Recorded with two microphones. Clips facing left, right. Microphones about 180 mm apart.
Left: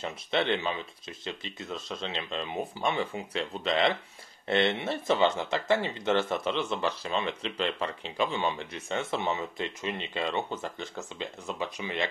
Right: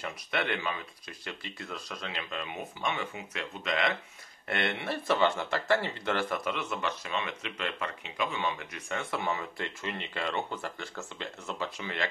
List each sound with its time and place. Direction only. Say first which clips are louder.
0.0 s speech: left 4 dB; 25° left (ahead or behind)